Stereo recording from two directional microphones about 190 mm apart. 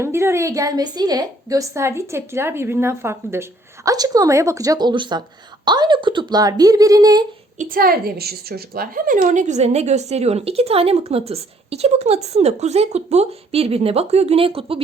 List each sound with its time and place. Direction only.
0.0 s a woman's voice: 15° right (ahead or behind)
7.6 s a woman's voice: 50° right (ahead or behind); by 14.8 s 30° right (ahead or behind)